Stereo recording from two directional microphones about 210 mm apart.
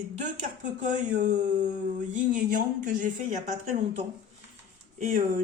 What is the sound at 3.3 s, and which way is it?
Speech, 35° right (ahead or behind).